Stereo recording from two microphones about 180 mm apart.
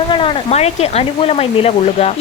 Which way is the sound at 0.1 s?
30° left (ahead or behind).